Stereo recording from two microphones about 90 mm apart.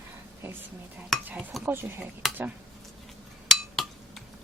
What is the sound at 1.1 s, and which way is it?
Dishes, centre (ahead or behind).